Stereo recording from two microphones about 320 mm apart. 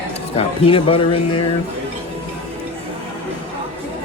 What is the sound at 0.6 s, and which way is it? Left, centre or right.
Speech, centre.